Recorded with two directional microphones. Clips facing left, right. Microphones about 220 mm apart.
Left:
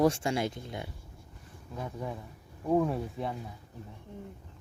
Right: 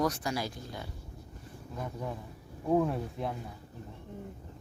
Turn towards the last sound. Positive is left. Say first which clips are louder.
# left 1 dB
turn(degrees=0)  # may be behind; listen again after turning